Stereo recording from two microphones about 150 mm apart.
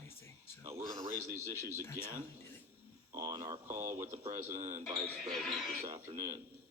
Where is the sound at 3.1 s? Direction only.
20° right (ahead or behind).